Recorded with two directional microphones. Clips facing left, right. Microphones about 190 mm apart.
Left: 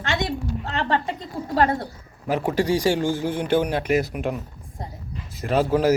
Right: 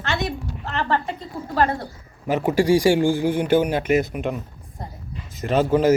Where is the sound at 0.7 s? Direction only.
20° left (ahead or behind).